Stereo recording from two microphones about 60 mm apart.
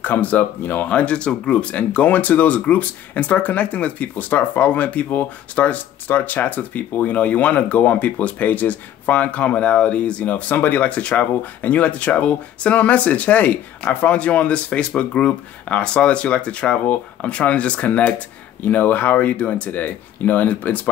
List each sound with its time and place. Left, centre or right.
0.0 s speech: left